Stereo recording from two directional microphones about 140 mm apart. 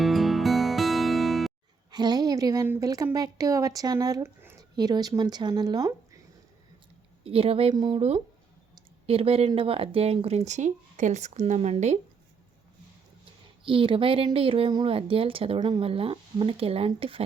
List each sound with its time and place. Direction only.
0.0 s music: centre (ahead or behind)
1.9 s speech: 30° right (ahead or behind)
7.3 s a woman's voice: 40° right (ahead or behind)
9.0 s speech: 45° right (ahead or behind)
13.7 s a woman's voice: 40° right (ahead or behind)